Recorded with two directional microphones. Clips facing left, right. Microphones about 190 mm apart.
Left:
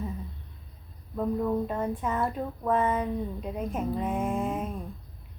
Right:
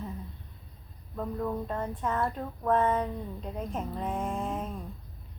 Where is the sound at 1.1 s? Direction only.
10° left (ahead or behind).